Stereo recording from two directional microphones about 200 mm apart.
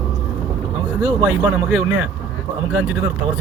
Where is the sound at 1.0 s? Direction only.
10° right (ahead or behind).